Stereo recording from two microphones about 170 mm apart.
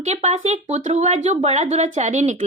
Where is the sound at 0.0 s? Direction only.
40° right (ahead or behind).